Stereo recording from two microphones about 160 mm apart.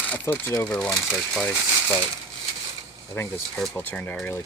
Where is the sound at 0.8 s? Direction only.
5° left (ahead or behind).